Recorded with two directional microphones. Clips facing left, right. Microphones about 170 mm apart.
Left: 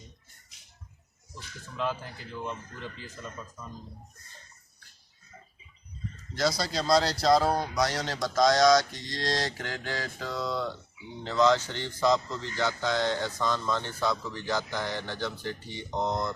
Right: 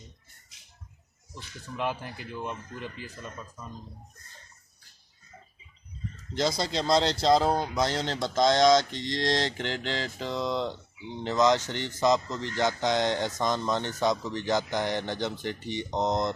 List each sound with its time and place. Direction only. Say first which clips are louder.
1.7 s speech: right 1 dB; 15° right (ahead or behind)
6.3 s speech: right 1 dB; 25° right (ahead or behind)